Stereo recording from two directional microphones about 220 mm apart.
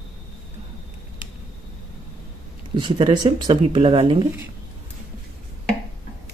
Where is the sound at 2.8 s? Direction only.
20° right (ahead or behind).